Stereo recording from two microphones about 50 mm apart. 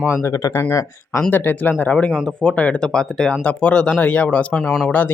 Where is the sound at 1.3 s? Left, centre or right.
Left.